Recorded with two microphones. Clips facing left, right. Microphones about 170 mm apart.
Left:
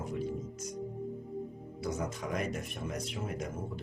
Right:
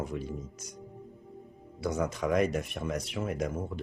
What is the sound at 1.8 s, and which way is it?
Speech, 80° right.